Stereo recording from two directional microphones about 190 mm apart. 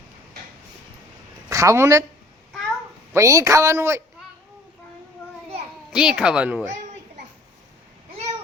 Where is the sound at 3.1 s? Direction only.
15° right (ahead or behind).